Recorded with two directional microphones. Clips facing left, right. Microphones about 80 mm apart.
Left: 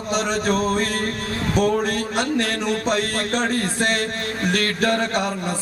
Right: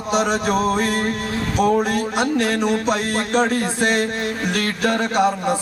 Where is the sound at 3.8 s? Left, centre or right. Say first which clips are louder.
Right 4 dB; centre.